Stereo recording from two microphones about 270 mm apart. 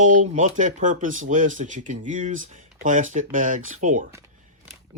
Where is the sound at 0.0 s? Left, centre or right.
Right.